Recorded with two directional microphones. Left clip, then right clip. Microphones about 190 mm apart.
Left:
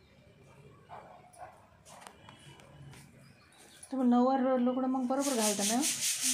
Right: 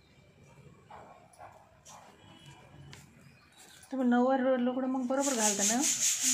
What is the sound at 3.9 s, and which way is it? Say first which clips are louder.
Speech: even; 15° left (ahead or behind).